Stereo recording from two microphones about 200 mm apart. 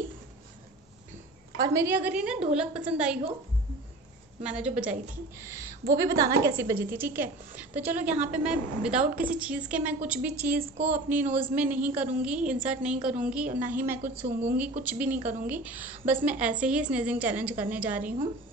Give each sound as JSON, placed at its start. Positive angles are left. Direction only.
{"t": 1.6, "sound": "a woman's voice", "side_deg": -15}
{"t": 4.4, "sound": "a woman's voice", "side_deg": -5}
{"t": 14.2, "sound": "speech", "side_deg": -40}
{"t": 14.8, "sound": "a woman's voice", "side_deg": -10}